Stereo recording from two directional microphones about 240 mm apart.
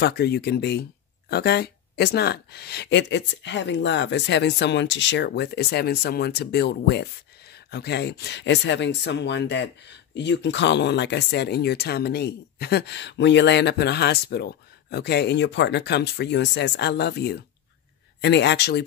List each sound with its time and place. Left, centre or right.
0.0 s speech: left